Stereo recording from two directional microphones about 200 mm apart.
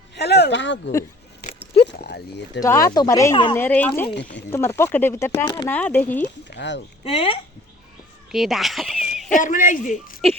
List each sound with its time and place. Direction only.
0.2 s speech: 55° left (ahead or behind)
2.0 s a sound: 55° left (ahead or behind)
2.6 s speech: 15° left (ahead or behind)
4.1 s speech: 60° left (ahead or behind)
4.5 s speech: 10° left (ahead or behind)
6.5 s speech: 60° left (ahead or behind)
7.0 s speech: 30° left (ahead or behind)
8.3 s a sound: centre (ahead or behind)
9.3 s a man's voice: 40° left (ahead or behind)